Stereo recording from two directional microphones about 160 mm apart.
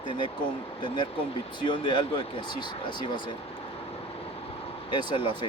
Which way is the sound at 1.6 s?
30° left (ahead or behind).